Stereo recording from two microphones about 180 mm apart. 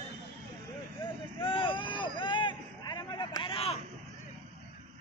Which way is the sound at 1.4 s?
30° left (ahead or behind).